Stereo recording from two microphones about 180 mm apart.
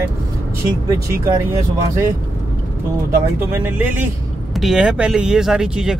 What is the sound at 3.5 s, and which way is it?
Speech, 10° right (ahead or behind).